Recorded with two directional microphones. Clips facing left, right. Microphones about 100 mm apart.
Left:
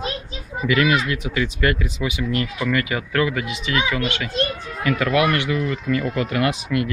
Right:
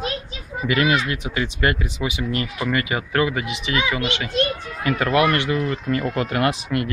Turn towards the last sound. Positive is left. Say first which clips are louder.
# even
turn(degrees=-40)  # may be behind; listen again after turning